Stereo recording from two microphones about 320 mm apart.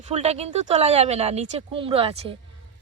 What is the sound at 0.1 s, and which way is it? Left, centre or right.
Speech, centre.